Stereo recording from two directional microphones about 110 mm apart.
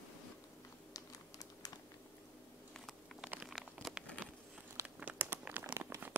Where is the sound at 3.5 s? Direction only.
Centre (ahead or behind).